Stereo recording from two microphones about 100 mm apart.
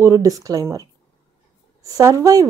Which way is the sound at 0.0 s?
35° right (ahead or behind).